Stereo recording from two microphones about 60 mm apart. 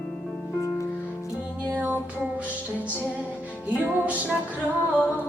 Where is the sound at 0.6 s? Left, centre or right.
Left.